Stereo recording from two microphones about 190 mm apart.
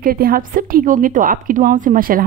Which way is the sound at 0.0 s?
50° right (ahead or behind).